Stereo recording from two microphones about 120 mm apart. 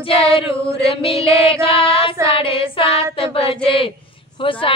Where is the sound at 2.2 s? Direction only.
50° left (ahead or behind).